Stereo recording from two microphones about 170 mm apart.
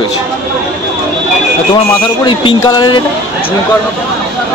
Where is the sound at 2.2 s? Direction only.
25° left (ahead or behind).